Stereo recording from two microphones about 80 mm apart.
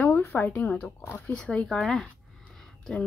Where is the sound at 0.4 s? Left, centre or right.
Centre.